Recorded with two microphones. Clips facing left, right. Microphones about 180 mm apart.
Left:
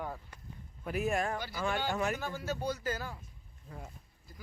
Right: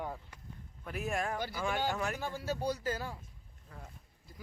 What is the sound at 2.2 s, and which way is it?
Speech, 30° right (ahead or behind).